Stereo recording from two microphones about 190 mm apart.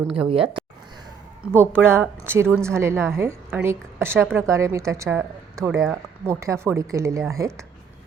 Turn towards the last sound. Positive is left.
turn(degrees=-15)  # may be behind; listen again after turning